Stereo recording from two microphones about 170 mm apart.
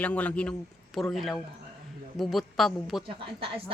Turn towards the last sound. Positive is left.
turn(degrees=-30)  # may be behind; listen again after turning